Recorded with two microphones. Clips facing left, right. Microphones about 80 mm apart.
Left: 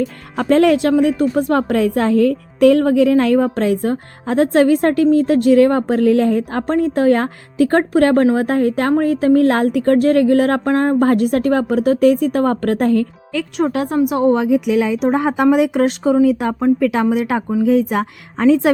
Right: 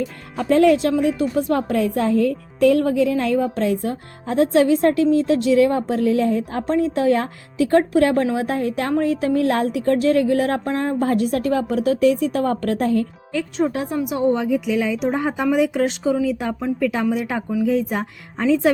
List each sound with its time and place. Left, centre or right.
0.3 s a woman's voice: left
13.3 s speech: left
13.9 s a woman's voice: left
14.2 s a woman's voice: left